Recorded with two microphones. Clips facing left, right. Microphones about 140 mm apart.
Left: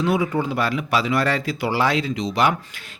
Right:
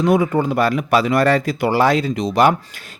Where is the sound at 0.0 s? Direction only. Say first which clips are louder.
Right 5 dB; 50° right (ahead or behind).